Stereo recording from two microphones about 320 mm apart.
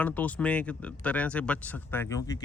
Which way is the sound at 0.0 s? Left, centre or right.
Centre.